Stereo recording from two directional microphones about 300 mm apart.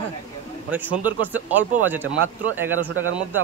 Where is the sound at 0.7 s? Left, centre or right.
Centre.